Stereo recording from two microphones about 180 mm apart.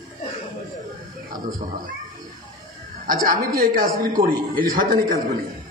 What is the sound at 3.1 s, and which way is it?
A man's voice, 50° right (ahead or behind).